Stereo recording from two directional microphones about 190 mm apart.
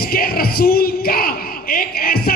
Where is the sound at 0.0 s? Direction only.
50° left (ahead or behind).